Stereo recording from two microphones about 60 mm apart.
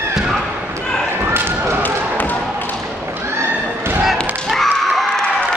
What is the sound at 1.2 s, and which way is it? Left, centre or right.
Thump, right.